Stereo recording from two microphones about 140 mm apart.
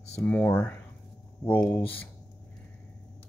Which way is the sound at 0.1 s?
10° left (ahead or behind).